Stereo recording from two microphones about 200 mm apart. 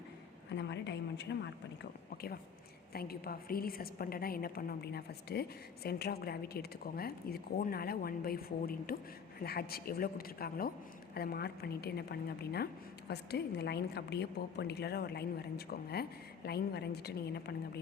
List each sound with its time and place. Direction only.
0.5 s a woman's voice: 60° left (ahead or behind)